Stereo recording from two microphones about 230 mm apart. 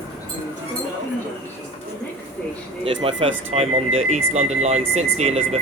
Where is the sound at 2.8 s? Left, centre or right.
Right.